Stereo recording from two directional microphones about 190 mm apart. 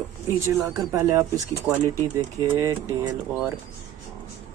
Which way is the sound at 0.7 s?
15° right (ahead or behind).